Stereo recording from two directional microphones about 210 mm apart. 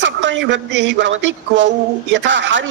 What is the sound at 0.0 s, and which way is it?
A woman's voice, 60° right (ahead or behind).